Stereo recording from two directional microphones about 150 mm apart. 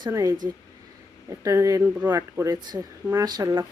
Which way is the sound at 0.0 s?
20° right (ahead or behind).